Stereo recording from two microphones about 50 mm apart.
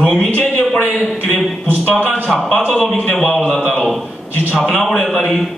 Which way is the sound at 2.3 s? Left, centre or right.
Centre.